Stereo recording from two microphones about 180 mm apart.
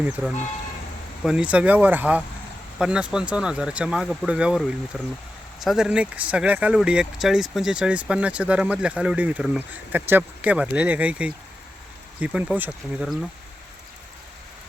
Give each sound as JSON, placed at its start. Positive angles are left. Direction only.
{"t": 0.0, "sound": "speech", "side_deg": 0}